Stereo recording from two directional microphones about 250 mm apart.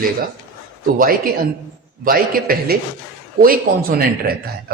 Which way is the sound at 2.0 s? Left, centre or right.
Right.